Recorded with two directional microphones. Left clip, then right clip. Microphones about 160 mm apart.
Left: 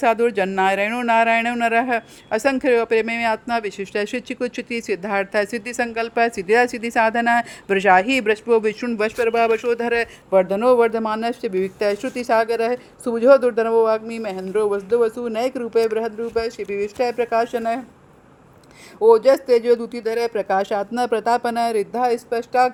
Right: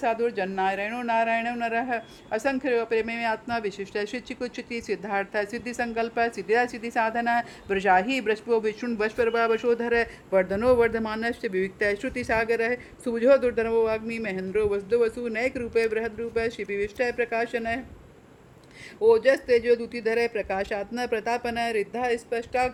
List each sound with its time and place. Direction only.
0.0 s speech: 45° left (ahead or behind)
8.9 s a man's voice: 25° left (ahead or behind)
18.9 s a man's voice: 25° left (ahead or behind)